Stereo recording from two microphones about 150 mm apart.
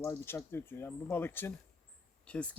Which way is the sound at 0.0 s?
15° left (ahead or behind).